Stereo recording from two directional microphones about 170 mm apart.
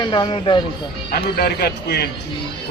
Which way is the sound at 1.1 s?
70° left (ahead or behind).